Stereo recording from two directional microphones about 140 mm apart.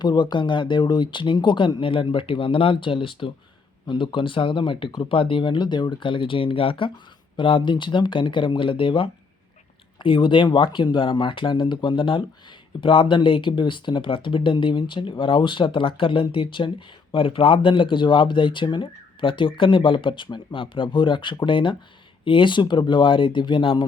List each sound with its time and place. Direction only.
0.0 s speech: 30° left (ahead or behind)